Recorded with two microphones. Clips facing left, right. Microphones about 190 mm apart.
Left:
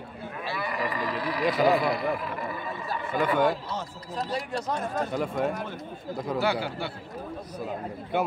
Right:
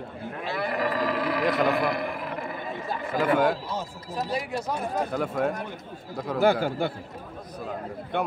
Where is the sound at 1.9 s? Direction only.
55° right (ahead or behind).